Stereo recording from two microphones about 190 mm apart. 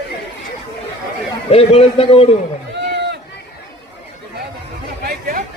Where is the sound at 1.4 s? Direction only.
30° left (ahead or behind).